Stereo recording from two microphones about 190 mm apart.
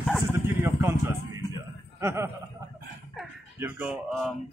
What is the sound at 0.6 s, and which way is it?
Chuckle, 15° right (ahead or behind).